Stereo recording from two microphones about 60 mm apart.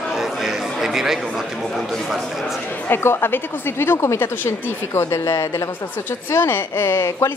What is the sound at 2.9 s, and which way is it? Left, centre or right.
Speech, left.